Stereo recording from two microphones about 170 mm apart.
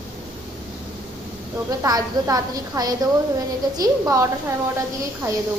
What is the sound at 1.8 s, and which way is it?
A woman's voice, 20° right (ahead or behind).